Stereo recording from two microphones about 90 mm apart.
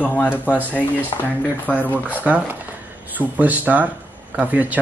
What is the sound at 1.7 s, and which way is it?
Speech, 15° left (ahead or behind).